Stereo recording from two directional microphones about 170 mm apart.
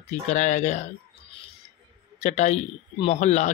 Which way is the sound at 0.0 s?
45° left (ahead or behind).